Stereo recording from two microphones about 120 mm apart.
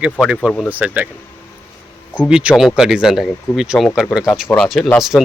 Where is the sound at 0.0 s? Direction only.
5° right (ahead or behind).